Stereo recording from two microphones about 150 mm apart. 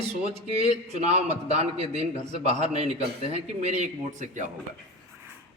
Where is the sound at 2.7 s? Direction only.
45° right (ahead or behind).